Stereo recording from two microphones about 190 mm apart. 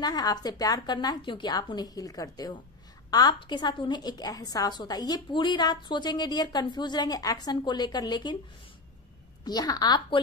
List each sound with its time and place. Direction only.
0.0 s a woman's voice: 20° left (ahead or behind)
9.4 s a woman's voice: 20° left (ahead or behind)